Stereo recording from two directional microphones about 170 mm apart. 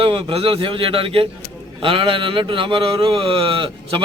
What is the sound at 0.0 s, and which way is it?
Speech, 30° right (ahead or behind).